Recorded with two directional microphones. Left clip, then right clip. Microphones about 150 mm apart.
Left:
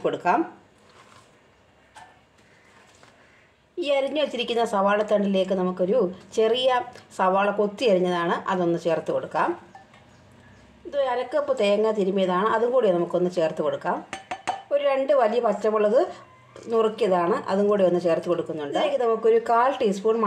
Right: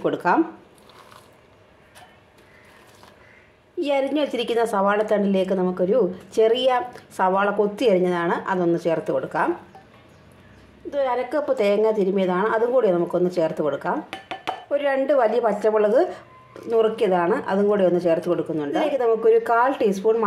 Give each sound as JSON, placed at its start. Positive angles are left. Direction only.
{"t": 0.0, "sound": "speech", "side_deg": -25}
{"t": 3.8, "sound": "a woman's voice", "side_deg": -20}
{"t": 10.9, "sound": "a woman's voice", "side_deg": -20}